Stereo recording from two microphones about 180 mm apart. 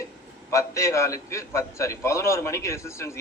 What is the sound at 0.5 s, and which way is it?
A man's voice, 15° left (ahead or behind).